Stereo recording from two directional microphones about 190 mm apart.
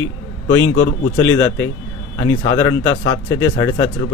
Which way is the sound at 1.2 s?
90° left.